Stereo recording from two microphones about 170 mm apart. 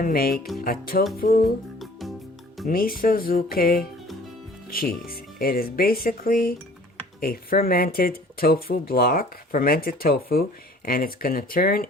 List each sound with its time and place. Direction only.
0.0 s speech: 60° left (ahead or behind)
1.8 s music: centre (ahead or behind)
2.6 s speech: 60° left (ahead or behind)